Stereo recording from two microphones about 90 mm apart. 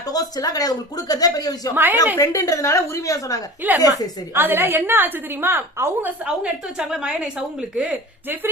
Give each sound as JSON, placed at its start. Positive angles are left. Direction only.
{"t": 0.1, "sound": "speech", "side_deg": 45}
{"t": 1.7, "sound": "a woman's voice", "side_deg": -20}
{"t": 2.1, "sound": "a woman's voice", "side_deg": 35}
{"t": 4.4, "sound": "a woman's voice", "side_deg": -25}
{"t": 6.1, "sound": "a woman's voice", "side_deg": -15}